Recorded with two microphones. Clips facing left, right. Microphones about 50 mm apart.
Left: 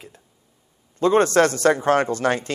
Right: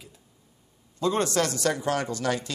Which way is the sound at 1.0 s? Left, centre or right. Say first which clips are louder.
Left 8 dB; left.